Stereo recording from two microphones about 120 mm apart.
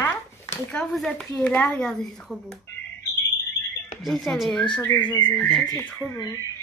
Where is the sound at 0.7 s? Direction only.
5° left (ahead or behind).